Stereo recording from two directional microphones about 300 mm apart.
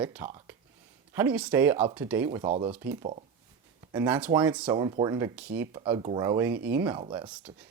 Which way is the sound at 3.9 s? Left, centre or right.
Centre.